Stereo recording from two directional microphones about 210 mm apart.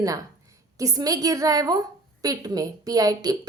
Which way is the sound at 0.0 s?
15° right (ahead or behind).